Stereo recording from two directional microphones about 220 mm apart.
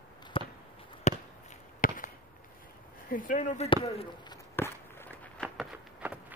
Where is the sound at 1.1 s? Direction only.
30° left (ahead or behind).